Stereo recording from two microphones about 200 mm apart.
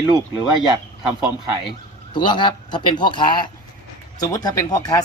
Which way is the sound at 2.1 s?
25° left (ahead or behind).